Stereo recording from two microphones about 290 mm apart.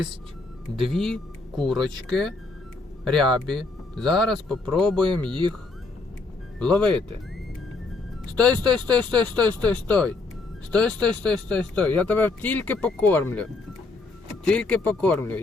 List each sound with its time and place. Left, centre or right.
0.8 s speech: centre
3.9 s speech: centre
5.3 s speech: centre
6.6 s speech: centre
8.4 s speech: centre